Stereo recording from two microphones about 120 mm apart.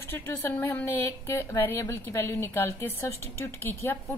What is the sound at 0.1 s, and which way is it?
A woman's voice, 20° left (ahead or behind).